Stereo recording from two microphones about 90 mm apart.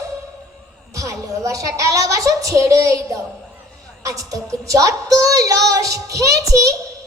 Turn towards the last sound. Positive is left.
turn(degrees=-40)  # may be behind; listen again after turning